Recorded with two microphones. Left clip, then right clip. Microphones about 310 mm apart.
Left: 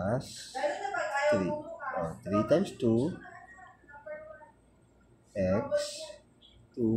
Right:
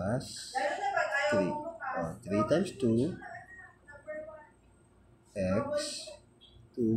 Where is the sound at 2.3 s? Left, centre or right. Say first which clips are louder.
Left 2 dB; centre.